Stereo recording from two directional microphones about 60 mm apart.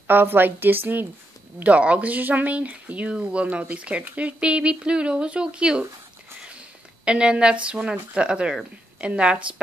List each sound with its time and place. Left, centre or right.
0.0 s a woman's voice: right
1.6 s speech: right
7.1 s a woman's voice: centre